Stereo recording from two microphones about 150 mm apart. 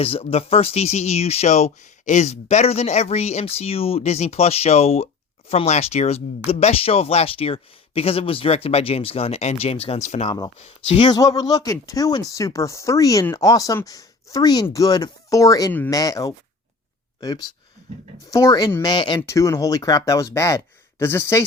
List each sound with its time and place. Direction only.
0.0 s speech: 40° left (ahead or behind)
10.2 s speech: 25° left (ahead or behind)